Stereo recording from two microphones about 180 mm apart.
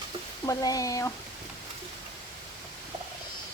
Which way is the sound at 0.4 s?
20° left (ahead or behind).